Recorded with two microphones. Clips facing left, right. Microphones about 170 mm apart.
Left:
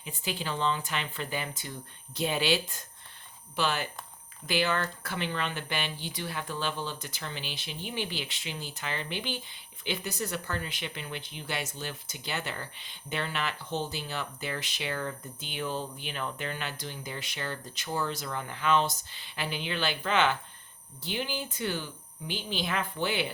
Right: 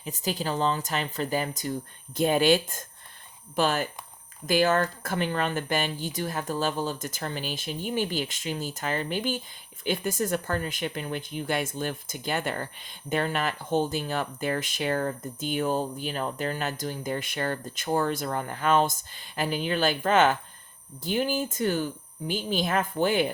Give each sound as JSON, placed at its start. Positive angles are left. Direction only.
{"t": 0.0, "sound": "speech", "side_deg": -40}